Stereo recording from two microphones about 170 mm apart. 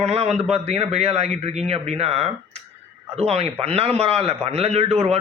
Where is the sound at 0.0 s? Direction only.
40° right (ahead or behind).